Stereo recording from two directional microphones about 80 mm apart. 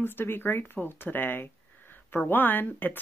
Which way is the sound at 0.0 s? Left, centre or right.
Left.